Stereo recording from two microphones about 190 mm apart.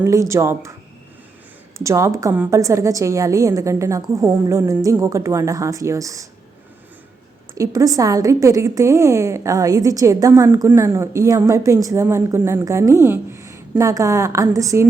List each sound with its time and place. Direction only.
0.0 s a woman's voice: 15° right (ahead or behind)
1.8 s a woman's voice: 15° right (ahead or behind)
7.5 s a woman's voice: 20° right (ahead or behind)